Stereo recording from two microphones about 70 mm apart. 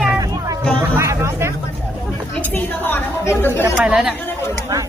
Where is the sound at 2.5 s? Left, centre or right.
Left.